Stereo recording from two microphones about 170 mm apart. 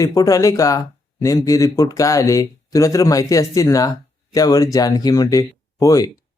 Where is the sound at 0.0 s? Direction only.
20° left (ahead or behind).